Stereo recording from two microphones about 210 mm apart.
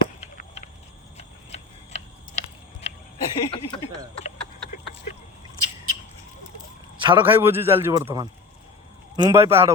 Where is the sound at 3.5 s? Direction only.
25° left (ahead or behind).